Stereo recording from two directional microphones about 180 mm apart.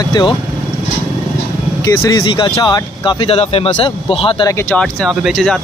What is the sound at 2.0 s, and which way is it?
Speech, 20° left (ahead or behind).